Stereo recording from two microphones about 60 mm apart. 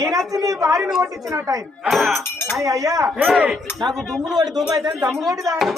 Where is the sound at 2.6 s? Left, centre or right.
Right.